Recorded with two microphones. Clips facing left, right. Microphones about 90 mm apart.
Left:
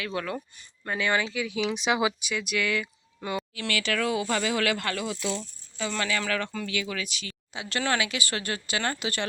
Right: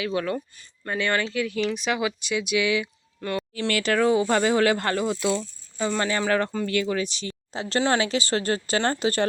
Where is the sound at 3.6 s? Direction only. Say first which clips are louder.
Right 7 dB; 40° right (ahead or behind).